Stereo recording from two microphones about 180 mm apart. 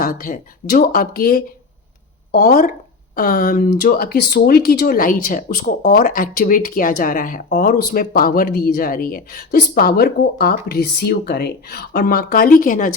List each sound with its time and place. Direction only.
0.0 s speech: 50° left (ahead or behind)